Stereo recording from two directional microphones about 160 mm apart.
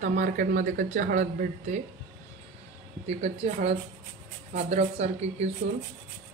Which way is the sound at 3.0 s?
40° right (ahead or behind).